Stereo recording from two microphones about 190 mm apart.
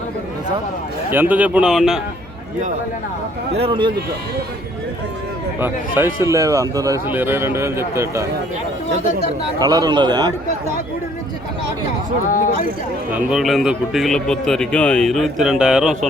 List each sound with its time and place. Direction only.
1.1 s speech: 10° right (ahead or behind)
3.6 s a man's voice: 25° right (ahead or behind)
5.5 s speech: 10° right (ahead or behind)
9.6 s a man's voice: 20° right (ahead or behind)
12.3 s speech: 45° left (ahead or behind)
13.1 s speech: 5° right (ahead or behind)